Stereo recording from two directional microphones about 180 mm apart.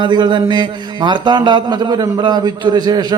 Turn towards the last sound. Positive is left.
turn(degrees=-25)  # may be behind; listen again after turning